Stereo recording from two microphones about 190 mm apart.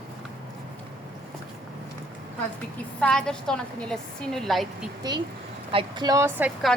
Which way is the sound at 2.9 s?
5° left (ahead or behind).